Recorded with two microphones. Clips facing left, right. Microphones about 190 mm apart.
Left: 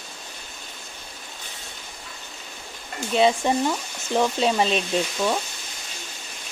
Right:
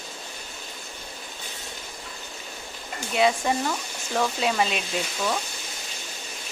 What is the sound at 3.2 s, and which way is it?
Speech, 25° left (ahead or behind).